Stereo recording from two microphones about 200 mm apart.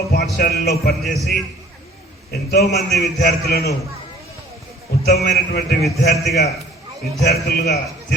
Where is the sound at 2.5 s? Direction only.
55° left (ahead or behind).